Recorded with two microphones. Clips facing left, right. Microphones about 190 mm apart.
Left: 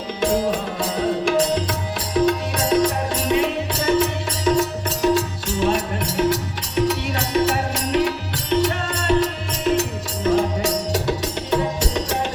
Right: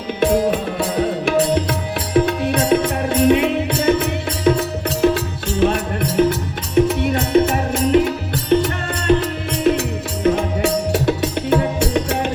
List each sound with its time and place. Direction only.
0.2 s music: 60° right (ahead or behind)
2.1 s music: 55° right (ahead or behind)